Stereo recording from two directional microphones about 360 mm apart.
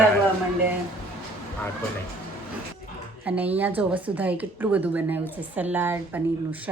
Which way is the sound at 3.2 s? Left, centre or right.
Centre.